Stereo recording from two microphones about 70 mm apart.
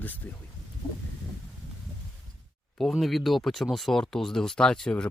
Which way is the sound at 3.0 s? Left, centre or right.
Centre.